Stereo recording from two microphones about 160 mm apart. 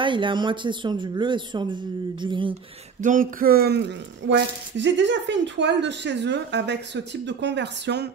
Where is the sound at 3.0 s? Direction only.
60° right (ahead or behind); by 8.1 s 90° right.